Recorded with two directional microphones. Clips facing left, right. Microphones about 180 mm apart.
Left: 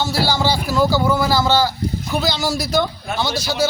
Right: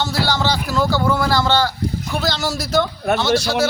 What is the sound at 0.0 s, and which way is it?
Speech, 10° left (ahead or behind).